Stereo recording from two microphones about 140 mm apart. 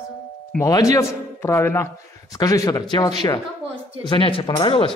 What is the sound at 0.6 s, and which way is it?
A man's voice, 25° left (ahead or behind).